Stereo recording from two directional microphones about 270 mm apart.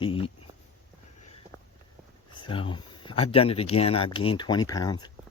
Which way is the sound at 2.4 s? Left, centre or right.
Centre.